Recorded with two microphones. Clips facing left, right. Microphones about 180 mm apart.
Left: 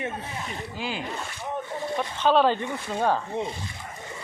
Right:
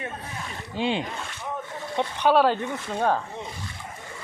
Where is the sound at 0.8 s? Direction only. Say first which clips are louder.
Right 8 dB; 25° right (ahead or behind).